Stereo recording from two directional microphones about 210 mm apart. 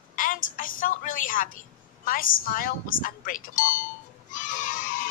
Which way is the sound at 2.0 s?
40° left (ahead or behind).